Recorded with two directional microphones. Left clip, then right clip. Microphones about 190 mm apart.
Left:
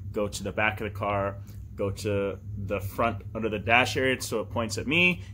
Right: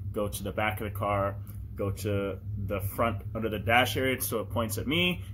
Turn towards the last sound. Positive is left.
turn(degrees=10)  # may be behind; listen again after turning